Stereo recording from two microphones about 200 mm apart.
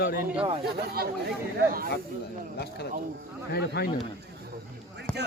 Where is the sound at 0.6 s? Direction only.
50° right (ahead or behind).